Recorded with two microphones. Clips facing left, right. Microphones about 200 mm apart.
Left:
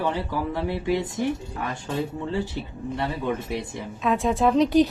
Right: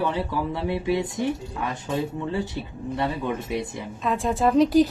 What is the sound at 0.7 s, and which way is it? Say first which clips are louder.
Speech: right 3 dB; 20° right (ahead or behind).